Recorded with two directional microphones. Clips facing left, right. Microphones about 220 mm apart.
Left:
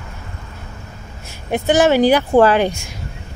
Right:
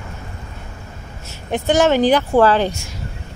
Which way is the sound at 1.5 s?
10° left (ahead or behind).